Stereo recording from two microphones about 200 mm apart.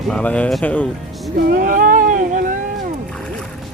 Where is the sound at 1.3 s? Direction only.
40° right (ahead or behind).